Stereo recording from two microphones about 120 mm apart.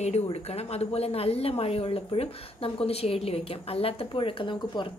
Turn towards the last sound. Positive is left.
turn(degrees=40)  # may be behind; listen again after turning